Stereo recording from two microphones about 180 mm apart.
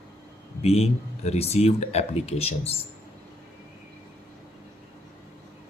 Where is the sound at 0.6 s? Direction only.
35° left (ahead or behind).